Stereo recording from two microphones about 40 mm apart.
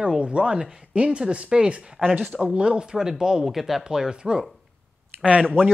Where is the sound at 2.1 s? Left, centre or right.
Right.